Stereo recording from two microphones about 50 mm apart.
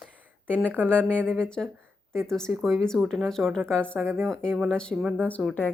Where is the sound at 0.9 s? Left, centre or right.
Left.